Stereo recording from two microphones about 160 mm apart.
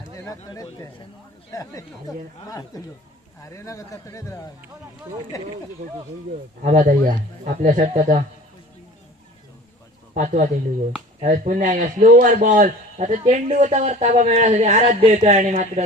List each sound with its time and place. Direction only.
0.5 s a man's voice: 20° left (ahead or behind)
6.6 s a man's voice: 55° right (ahead or behind)
10.2 s a man's voice: 55° right (ahead or behind)